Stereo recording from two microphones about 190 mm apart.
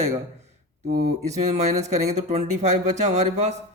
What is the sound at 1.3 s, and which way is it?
Speech, 35° right (ahead or behind).